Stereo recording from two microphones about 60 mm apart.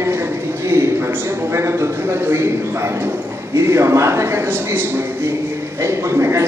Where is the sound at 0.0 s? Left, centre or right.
Right.